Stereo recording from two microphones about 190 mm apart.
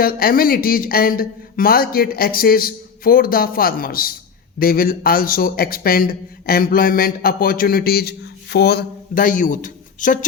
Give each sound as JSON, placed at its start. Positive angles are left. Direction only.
{"t": 0.0, "sound": "a man's voice", "side_deg": 50}